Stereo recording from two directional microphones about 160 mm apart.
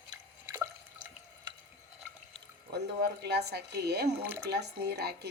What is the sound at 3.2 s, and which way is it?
A woman's voice, 90° right.